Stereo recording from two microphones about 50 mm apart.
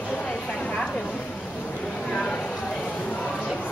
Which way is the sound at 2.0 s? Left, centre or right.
Centre.